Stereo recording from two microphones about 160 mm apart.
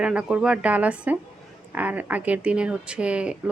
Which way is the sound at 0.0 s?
5° right (ahead or behind).